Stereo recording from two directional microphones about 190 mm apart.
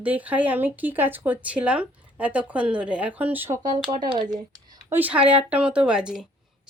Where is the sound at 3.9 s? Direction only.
25° right (ahead or behind).